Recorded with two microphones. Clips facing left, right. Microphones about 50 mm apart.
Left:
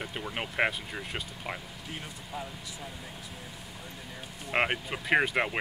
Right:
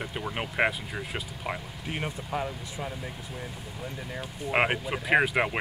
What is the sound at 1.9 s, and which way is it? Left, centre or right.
Speech, right.